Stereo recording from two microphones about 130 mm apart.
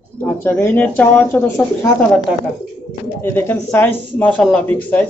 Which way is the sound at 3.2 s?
15° left (ahead or behind).